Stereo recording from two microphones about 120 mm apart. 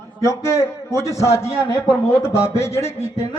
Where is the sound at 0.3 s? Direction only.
25° left (ahead or behind).